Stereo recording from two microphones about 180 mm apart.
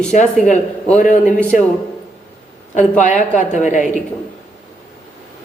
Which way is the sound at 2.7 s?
45° left (ahead or behind).